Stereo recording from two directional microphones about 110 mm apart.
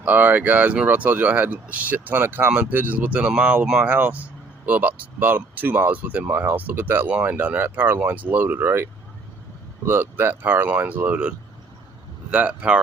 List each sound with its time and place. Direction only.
0.0 s speech: 15° right (ahead or behind)